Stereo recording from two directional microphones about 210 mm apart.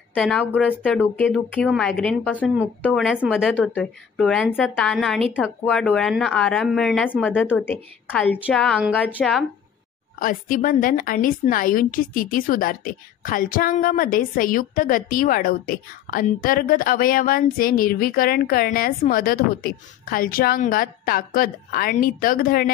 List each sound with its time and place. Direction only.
0.1 s a woman's voice: centre (ahead or behind)
7.6 s a woman's voice: 10° left (ahead or behind)
10.1 s a woman's voice: 40° left (ahead or behind)